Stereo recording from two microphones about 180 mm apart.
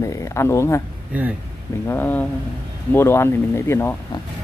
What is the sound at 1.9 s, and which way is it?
Speech, 10° left (ahead or behind).